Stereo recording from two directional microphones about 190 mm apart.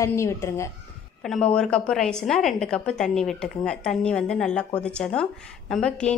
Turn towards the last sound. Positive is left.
turn(degrees=5)  # may be behind; listen again after turning